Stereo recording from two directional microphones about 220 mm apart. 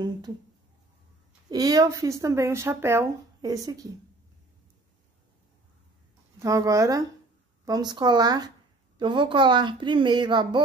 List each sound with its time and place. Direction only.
1.5 s speech: 15° right (ahead or behind)
6.4 s a woman's voice: 15° right (ahead or behind)